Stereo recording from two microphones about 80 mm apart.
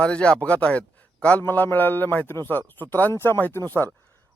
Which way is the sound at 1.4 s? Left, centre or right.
Left.